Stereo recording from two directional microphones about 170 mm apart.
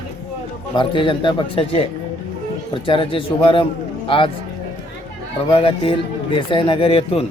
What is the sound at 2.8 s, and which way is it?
A man's voice, 30° left (ahead or behind).